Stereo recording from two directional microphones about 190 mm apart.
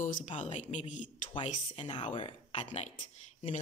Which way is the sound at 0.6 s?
40° left (ahead or behind).